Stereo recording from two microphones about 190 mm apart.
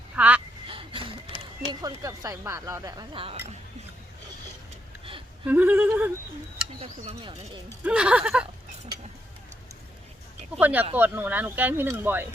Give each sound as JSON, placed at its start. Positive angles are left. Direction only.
{"t": 0.2, "sound": "a sound", "side_deg": -10}
{"t": 0.7, "sound": "a sound", "side_deg": -25}
{"t": 1.8, "sound": "speech", "side_deg": -20}
{"t": 5.5, "sound": "speech", "side_deg": -10}
{"t": 6.8, "sound": "speech", "side_deg": -30}
{"t": 7.9, "sound": "speech", "side_deg": -5}
{"t": 10.6, "sound": "speech", "side_deg": -10}